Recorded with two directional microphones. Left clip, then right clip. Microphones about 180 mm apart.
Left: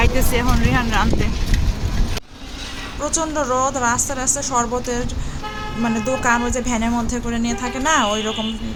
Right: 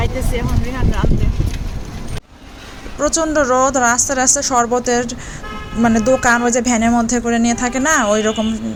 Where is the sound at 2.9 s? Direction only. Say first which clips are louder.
Right 7 dB; 20° right (ahead or behind).